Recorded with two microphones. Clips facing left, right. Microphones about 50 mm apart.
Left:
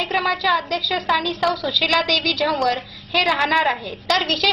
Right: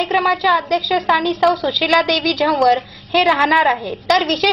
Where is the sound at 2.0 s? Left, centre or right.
Right.